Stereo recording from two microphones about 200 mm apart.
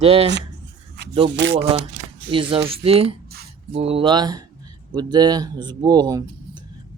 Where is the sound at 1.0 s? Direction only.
60° right (ahead or behind).